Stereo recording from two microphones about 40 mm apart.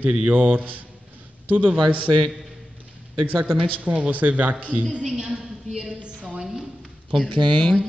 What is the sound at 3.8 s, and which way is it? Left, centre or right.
Speech, right.